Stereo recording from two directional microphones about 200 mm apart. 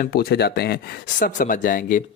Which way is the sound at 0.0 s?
50° left (ahead or behind).